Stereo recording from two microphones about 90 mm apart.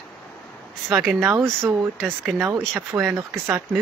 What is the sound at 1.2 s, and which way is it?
Speech, 30° right (ahead or behind).